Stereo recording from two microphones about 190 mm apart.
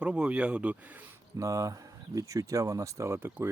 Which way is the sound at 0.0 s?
5° right (ahead or behind).